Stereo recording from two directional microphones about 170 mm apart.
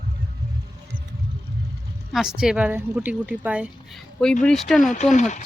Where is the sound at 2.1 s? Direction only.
5° right (ahead or behind).